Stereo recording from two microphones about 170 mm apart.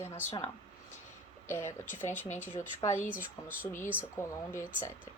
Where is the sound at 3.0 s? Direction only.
10° right (ahead or behind).